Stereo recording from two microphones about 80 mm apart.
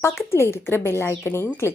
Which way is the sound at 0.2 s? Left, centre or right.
Left.